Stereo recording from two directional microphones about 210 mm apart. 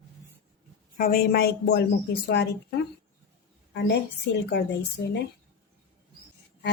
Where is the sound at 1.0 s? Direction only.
45° left (ahead or behind).